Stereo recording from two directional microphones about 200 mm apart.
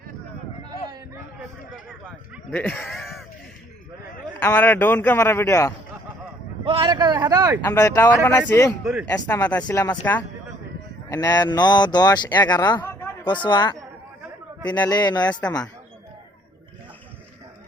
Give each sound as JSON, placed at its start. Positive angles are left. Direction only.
{"t": 1.7, "sound": "a sound", "side_deg": -5}
{"t": 2.5, "sound": "a sound", "side_deg": 10}
{"t": 4.4, "sound": "a man's voice", "side_deg": 10}
{"t": 6.7, "sound": "a man's voice", "side_deg": -25}
{"t": 7.6, "sound": "a man's voice", "side_deg": 15}
{"t": 8.8, "sound": "speech", "side_deg": 0}
{"t": 9.0, "sound": "a man's voice", "side_deg": 15}